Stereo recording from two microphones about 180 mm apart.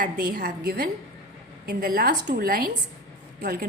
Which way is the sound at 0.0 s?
50° right (ahead or behind).